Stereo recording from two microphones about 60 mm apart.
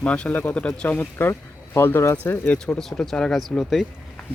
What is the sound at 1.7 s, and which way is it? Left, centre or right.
Speech, left.